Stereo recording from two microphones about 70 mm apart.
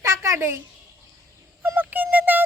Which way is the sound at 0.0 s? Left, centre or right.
Right.